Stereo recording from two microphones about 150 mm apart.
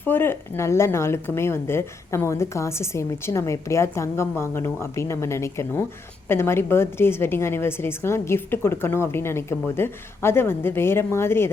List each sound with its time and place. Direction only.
0.0 s speech: 15° left (ahead or behind)